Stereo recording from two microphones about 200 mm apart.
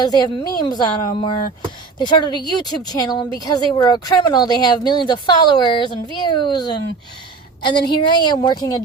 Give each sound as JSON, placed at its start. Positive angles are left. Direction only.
{"t": 0.0, "sound": "speech", "side_deg": 20}